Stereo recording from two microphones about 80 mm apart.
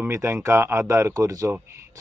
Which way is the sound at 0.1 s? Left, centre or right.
Right.